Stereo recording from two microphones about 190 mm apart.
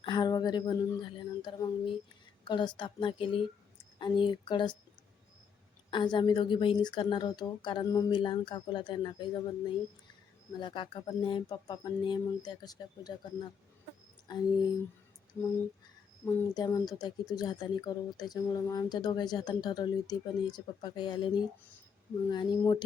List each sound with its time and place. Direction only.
0.0 s a woman's voice: 25° left (ahead or behind)
5.9 s a woman's voice: 25° left (ahead or behind)
16.2 s a woman's voice: 15° left (ahead or behind)